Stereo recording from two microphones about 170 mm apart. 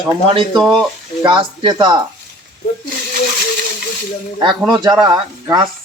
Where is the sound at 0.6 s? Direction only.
Centre (ahead or behind).